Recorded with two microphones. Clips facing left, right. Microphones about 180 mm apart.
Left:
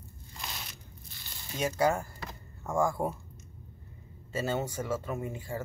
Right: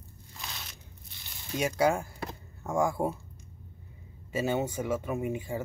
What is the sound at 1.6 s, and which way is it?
Speech, 10° right (ahead or behind).